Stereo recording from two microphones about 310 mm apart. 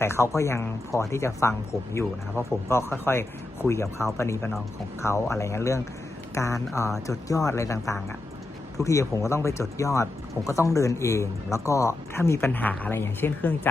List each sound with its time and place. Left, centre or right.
0.0 s speech: centre